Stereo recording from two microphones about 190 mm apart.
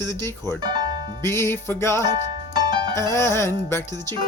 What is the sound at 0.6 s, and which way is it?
Speech, 25° right (ahead or behind).